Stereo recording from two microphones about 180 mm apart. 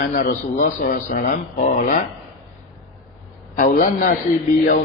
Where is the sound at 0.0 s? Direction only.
50° left (ahead or behind).